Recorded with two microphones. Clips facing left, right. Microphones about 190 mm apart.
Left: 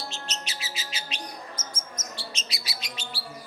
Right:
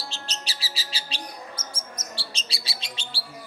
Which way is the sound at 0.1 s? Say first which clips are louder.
Left 1 dB; 35° right (ahead or behind).